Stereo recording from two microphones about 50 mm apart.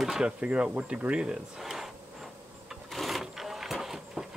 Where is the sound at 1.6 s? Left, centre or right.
Centre.